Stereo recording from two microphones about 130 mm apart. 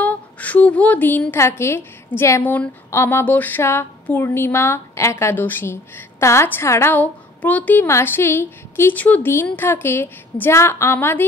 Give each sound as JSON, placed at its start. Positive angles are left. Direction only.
{"t": 0.0, "sound": "a woman's voice", "side_deg": 10}